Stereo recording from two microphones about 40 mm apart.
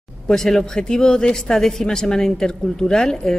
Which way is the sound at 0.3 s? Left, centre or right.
Centre.